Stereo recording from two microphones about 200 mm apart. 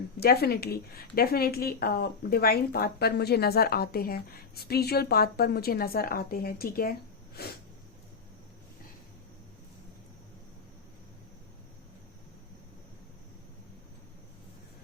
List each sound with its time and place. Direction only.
0.2 s a woman's voice: 50° left (ahead or behind)